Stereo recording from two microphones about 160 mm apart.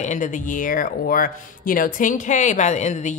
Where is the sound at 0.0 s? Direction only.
50° left (ahead or behind).